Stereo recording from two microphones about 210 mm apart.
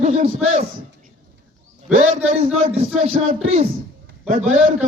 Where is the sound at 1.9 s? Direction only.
35° right (ahead or behind).